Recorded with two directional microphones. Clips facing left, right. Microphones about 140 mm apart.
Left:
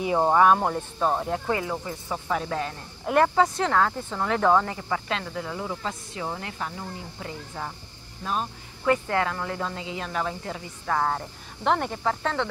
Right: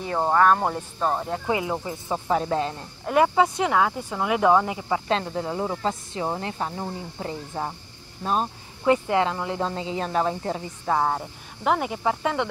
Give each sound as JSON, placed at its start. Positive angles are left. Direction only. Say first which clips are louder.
{"t": 0.0, "sound": "speech", "louder": "left 1 dB", "side_deg": 10}
{"t": 0.6, "sound": "speech", "louder": "even", "side_deg": 0}
{"t": 1.5, "sound": "speech", "louder": "right 2 dB", "side_deg": -15}
{"t": 3.1, "sound": "speech", "louder": "right 1 dB", "side_deg": -5}
{"t": 5.0, "sound": "speech", "louder": "right 5 dB", "side_deg": -30}
{"t": 8.8, "sound": "speech", "louder": "right 3 dB", "side_deg": -20}
{"t": 9.7, "sound": "speech", "louder": "right 5 dB", "side_deg": -30}
{"t": 10.9, "sound": "speech", "louder": "right 2 dB", "side_deg": -15}